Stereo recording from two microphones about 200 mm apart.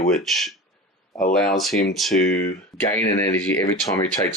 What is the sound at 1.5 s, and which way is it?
Speech, centre (ahead or behind).